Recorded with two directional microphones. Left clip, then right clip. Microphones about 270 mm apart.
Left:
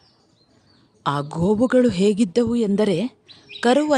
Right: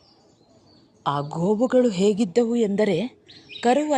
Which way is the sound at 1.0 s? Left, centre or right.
Centre.